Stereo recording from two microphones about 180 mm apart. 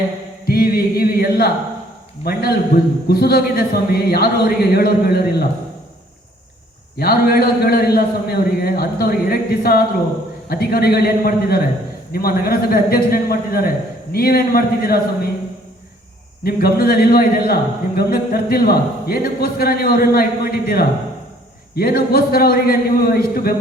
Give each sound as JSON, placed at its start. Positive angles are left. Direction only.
{"t": 0.4, "sound": "chant", "side_deg": 55}
{"t": 3.1, "sound": "a man's voice", "side_deg": 60}
{"t": 7.0, "sound": "a man's voice", "side_deg": 55}
{"t": 16.4, "sound": "a man's voice", "side_deg": 55}